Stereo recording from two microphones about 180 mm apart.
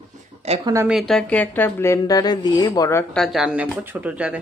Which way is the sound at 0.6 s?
15° right (ahead or behind).